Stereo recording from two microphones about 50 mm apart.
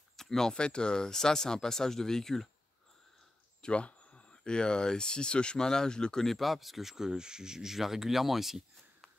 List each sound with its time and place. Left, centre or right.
0.1 s speech: centre
3.6 s speech: left
6.2 s speech: centre